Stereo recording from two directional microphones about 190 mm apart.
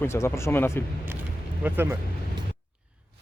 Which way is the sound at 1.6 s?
10° right (ahead or behind).